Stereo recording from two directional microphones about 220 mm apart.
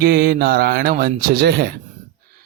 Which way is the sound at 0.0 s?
45° right (ahead or behind).